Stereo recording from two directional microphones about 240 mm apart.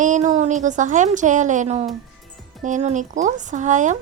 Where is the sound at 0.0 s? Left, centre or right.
Right.